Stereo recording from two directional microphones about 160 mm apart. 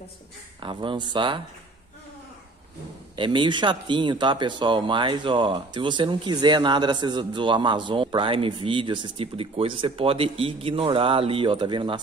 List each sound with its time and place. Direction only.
0.6 s speech: 30° right (ahead or behind)
3.2 s speech: 30° right (ahead or behind)